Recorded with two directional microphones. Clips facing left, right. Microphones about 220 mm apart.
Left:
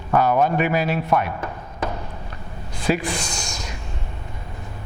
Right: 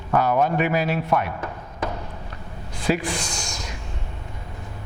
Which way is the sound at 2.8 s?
10° left (ahead or behind).